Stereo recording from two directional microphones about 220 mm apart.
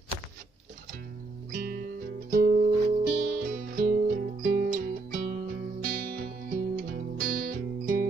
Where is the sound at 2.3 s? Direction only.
40° right (ahead or behind).